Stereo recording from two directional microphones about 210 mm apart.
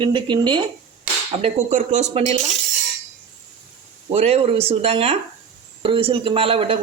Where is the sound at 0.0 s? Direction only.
20° right (ahead or behind).